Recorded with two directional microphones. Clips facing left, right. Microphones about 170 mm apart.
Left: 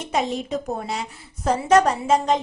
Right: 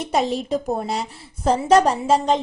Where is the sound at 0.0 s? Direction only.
35° right (ahead or behind).